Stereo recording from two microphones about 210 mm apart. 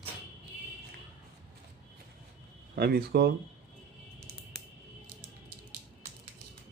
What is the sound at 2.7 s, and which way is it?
Speech, 50° right (ahead or behind).